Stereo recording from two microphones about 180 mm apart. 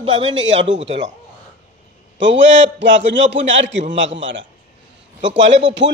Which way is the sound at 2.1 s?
80° right.